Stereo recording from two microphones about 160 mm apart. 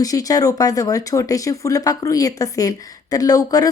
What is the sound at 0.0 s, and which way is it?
Speech, 20° left (ahead or behind).